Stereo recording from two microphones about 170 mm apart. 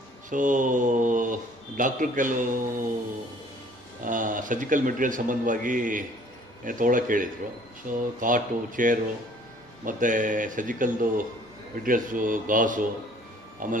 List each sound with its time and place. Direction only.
0.3 s speech: 50° right (ahead or behind)
4.0 s speech: 50° right (ahead or behind)